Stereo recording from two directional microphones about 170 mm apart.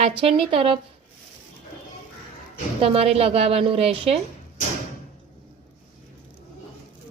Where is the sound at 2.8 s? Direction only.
35° right (ahead or behind).